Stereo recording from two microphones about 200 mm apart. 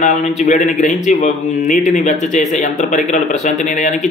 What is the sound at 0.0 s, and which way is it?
A man's voice, 35° left (ahead or behind).